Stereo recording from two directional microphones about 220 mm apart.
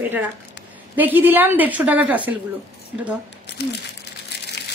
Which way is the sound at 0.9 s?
10° right (ahead or behind).